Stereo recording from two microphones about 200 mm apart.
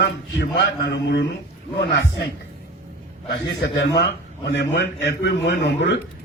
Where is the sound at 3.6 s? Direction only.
55° left (ahead or behind).